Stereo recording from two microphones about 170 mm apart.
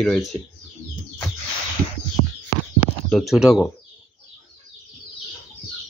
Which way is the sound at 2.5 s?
55° left (ahead or behind).